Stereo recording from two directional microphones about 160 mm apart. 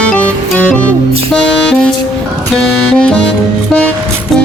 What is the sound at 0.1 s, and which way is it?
Music, 5° left (ahead or behind).